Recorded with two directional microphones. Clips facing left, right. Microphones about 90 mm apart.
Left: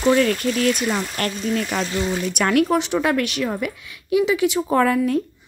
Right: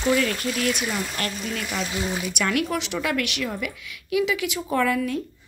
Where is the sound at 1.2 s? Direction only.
45° left (ahead or behind).